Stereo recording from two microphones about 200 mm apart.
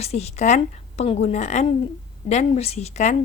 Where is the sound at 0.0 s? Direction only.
35° left (ahead or behind).